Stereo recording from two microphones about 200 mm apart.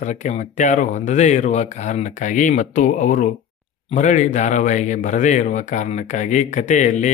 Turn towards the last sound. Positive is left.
turn(degrees=35)  # may be behind; listen again after turning